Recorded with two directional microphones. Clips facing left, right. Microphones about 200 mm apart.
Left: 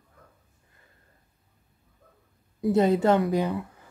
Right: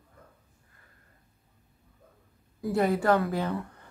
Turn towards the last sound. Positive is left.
turn(degrees=5)  # may be behind; listen again after turning